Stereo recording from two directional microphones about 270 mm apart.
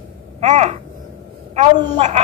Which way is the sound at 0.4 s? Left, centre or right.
Right.